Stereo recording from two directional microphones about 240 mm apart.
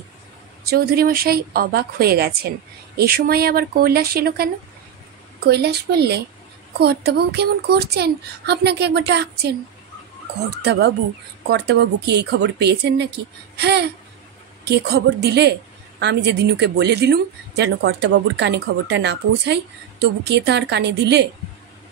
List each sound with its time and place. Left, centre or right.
0.7 s a woman's voice: right
5.5 s a woman's voice: right
10.6 s a woman's voice: right